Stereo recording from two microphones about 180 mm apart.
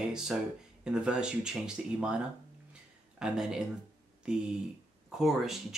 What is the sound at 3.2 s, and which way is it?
Speech, 5° right (ahead or behind).